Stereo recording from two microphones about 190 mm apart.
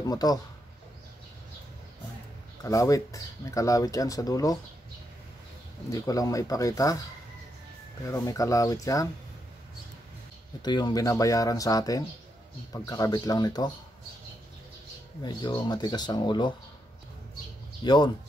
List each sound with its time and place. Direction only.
0.0 s speech: 20° left (ahead or behind)
2.6 s speech: 15° left (ahead or behind)
5.9 s speech: 15° left (ahead or behind)
8.1 s speech: 15° left (ahead or behind)
10.6 s speech: 20° left (ahead or behind)
15.2 s speech: 20° left (ahead or behind)
17.8 s speech: 25° left (ahead or behind)